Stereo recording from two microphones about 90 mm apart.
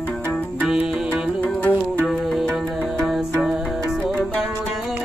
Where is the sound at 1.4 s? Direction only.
20° left (ahead or behind).